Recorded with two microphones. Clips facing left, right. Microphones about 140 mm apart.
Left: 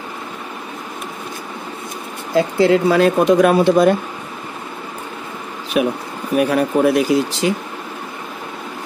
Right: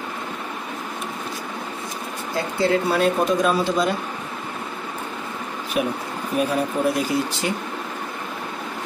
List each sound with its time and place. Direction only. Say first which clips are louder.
2.3 s speech: left 7 dB; 90° left; by 3.9 s 60° left (ahead or behind)
6.3 s speech: left 7 dB; 70° left (ahead or behind)